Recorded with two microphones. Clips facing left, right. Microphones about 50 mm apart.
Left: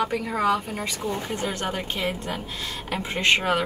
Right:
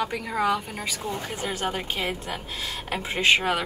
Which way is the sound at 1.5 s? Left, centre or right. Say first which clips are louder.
Even; centre.